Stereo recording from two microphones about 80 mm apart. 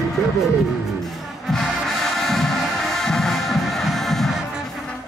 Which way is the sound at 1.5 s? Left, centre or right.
Centre.